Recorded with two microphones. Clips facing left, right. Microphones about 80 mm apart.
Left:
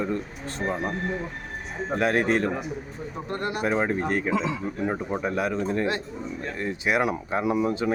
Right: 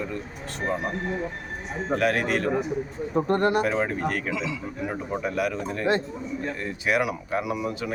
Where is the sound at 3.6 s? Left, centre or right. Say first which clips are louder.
Even; left.